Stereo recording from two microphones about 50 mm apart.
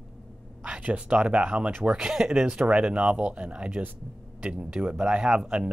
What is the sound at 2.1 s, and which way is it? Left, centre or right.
Speech, centre.